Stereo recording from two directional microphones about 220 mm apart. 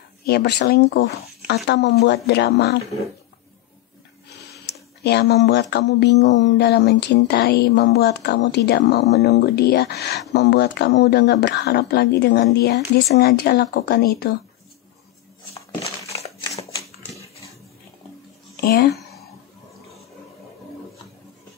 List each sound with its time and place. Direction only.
0.2 s speech: 45° left (ahead or behind)
5.0 s speech: 50° left (ahead or behind)
16.5 s typewriter: 15° left (ahead or behind)
18.9 s a sound: centre (ahead or behind)